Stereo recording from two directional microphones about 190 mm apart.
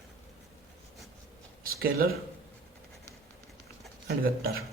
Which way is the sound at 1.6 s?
50° right (ahead or behind).